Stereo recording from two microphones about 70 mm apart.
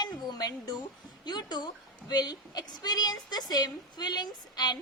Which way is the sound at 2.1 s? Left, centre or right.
Left.